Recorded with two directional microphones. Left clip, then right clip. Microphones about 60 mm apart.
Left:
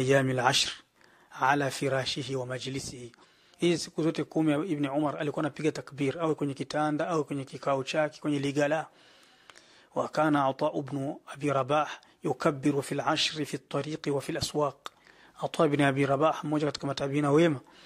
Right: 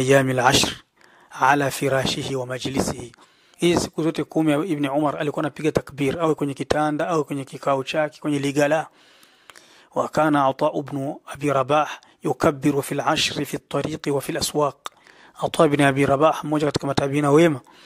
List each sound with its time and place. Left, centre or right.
0.0 s speech: right